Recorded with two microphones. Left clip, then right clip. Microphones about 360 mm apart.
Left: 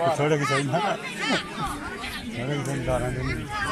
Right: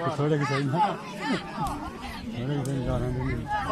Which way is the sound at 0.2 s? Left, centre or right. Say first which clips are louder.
Left 4 dB; left.